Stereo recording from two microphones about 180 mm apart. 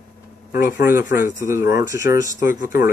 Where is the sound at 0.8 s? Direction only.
15° right (ahead or behind).